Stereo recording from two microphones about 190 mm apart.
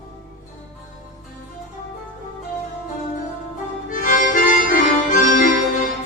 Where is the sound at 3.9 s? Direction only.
45° left (ahead or behind).